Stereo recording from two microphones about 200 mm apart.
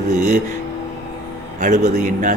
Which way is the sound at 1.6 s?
40° right (ahead or behind).